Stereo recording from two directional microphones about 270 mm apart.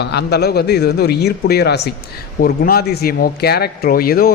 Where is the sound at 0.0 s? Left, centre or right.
Left.